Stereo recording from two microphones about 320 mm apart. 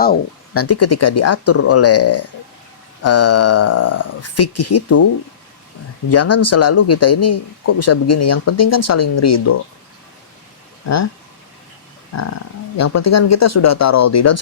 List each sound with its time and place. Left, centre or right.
0.5 s speech: left
6.1 s speech: left
10.8 s speech: left
12.1 s speech: left